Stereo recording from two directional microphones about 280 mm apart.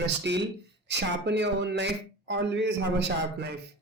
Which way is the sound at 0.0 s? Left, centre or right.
Right.